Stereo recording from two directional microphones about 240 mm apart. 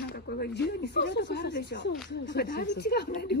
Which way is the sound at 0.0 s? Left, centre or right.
Left.